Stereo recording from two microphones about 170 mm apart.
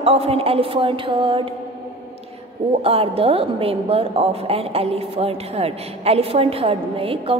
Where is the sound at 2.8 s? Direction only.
35° right (ahead or behind).